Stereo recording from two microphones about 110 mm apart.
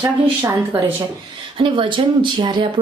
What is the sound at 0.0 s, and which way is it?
Speech, 30° right (ahead or behind).